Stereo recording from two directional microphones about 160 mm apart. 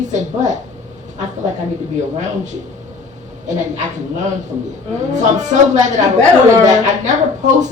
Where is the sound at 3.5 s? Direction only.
50° right (ahead or behind).